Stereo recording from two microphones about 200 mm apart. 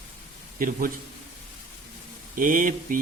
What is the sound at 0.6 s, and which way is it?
Speech, 45° right (ahead or behind).